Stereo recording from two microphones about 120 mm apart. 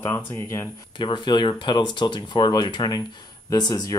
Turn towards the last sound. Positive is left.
turn(degrees=30)  # may be behind; listen again after turning